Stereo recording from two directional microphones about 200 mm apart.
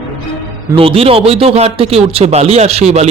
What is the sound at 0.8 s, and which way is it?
Speech, 30° right (ahead or behind).